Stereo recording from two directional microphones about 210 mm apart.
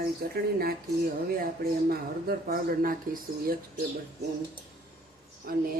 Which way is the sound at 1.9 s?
45° right (ahead or behind).